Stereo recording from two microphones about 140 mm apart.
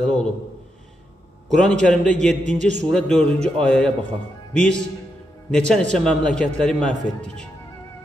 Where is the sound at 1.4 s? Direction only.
Centre (ahead or behind).